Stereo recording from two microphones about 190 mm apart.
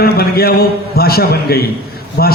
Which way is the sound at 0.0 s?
55° left (ahead or behind).